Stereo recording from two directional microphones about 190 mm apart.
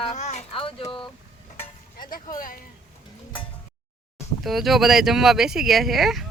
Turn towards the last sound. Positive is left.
turn(degrees=0)  # may be behind; listen again after turning